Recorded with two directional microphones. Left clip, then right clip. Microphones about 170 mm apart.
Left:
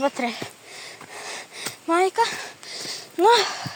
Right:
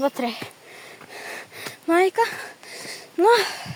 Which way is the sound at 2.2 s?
25° right (ahead or behind).